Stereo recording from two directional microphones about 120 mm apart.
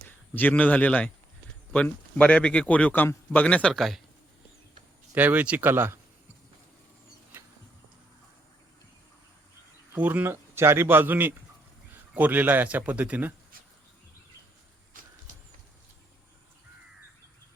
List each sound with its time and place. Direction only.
0.3 s a man's voice: 15° left (ahead or behind)
5.1 s a man's voice: 15° right (ahead or behind)
9.9 s a man's voice: 15° right (ahead or behind)
15.3 s a sound: 90° right